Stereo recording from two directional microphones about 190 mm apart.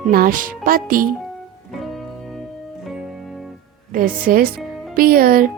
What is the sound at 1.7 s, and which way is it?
Music, centre (ahead or behind).